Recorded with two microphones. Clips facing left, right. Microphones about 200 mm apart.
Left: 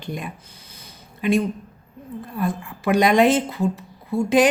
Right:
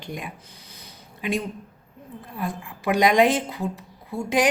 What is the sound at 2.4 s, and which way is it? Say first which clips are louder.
A woman's voice: left 5 dB; 15° right (ahead or behind).